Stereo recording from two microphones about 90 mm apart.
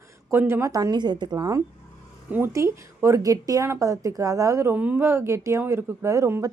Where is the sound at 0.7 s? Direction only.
50° right (ahead or behind).